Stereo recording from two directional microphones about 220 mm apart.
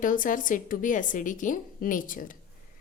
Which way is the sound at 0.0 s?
35° left (ahead or behind).